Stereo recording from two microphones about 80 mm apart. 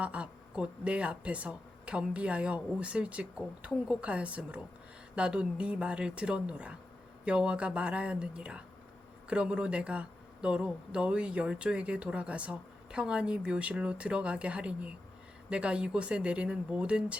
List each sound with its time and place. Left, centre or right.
0.0 s speech: centre